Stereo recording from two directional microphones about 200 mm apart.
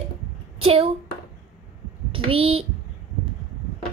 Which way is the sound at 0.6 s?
30° right (ahead or behind).